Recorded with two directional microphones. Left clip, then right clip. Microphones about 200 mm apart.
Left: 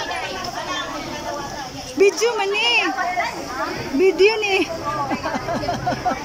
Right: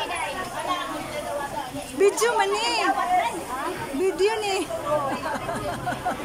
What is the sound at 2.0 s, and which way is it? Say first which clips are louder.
Speech: left 3 dB; 10° left (ahead or behind).